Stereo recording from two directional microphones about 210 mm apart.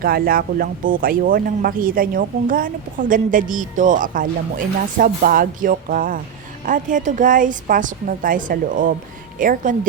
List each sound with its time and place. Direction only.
0.0 s speech: 45° right (ahead or behind)